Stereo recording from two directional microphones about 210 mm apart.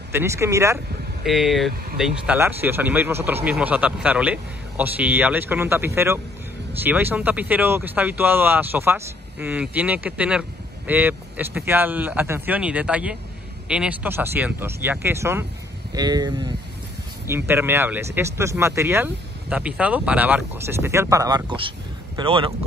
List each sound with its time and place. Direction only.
0.1 s speech: 10° right (ahead or behind)
1.2 s speech: centre (ahead or behind); by 22.7 s 25° right (ahead or behind)